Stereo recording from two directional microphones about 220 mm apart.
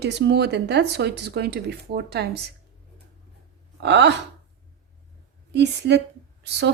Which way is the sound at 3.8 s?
50° right (ahead or behind).